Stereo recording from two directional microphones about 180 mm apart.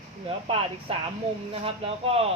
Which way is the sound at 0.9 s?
30° right (ahead or behind).